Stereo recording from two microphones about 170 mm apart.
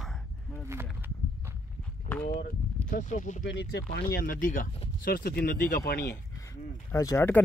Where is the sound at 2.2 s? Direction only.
55° left (ahead or behind).